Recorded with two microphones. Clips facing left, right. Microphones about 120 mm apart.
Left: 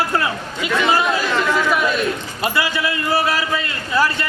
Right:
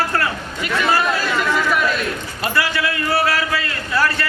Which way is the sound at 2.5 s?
15° left (ahead or behind).